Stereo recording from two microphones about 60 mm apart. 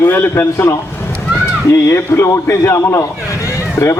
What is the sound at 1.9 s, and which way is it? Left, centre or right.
A man's voice, left.